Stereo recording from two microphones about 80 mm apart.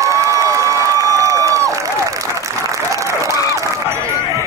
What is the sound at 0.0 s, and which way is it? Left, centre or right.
Crowd, right.